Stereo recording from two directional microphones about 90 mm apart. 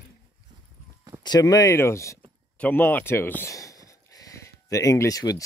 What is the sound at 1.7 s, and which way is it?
Speech, 30° left (ahead or behind).